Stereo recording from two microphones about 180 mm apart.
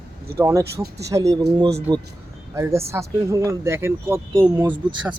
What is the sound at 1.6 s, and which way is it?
Speech, 35° right (ahead or behind).